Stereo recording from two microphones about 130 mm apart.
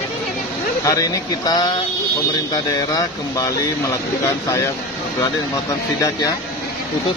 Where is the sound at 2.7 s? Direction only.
30° left (ahead or behind).